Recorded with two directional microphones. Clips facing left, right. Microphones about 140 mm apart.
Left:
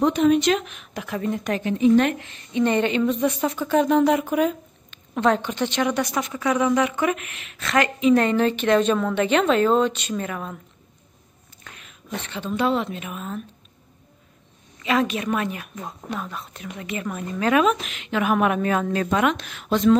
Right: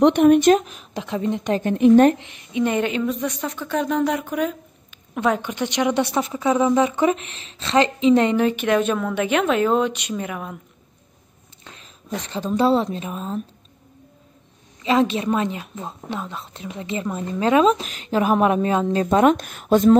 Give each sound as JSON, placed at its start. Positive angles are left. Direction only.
{"t": 0.0, "sound": "a woman's voice", "side_deg": -60}
{"t": 1.6, "sound": "a woman's voice", "side_deg": -55}
{"t": 2.1, "sound": "speech", "side_deg": -15}
{"t": 4.9, "sound": "a woman's voice", "side_deg": -10}
{"t": 11.6, "sound": "a woman's voice", "side_deg": -30}
{"t": 14.8, "sound": "a woman's voice", "side_deg": -25}